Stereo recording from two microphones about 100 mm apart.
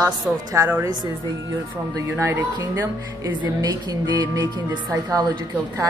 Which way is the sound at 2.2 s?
30° right (ahead or behind).